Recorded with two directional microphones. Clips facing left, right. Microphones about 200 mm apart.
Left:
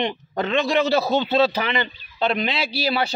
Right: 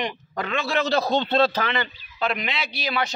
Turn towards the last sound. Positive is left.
turn(degrees=30)  # may be behind; listen again after turning